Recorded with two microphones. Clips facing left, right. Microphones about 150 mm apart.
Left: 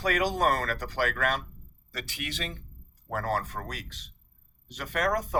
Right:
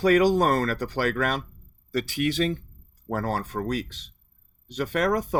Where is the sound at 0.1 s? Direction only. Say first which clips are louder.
Right 6 dB; 35° right (ahead or behind).